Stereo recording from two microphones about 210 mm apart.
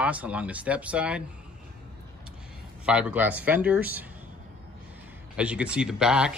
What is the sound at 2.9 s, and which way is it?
Speech, 5° right (ahead or behind).